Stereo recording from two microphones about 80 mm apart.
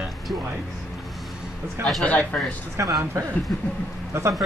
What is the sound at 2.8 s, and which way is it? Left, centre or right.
Speech, right.